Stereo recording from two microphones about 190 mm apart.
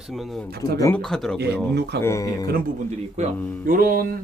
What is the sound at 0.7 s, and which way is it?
Speech, 15° left (ahead or behind).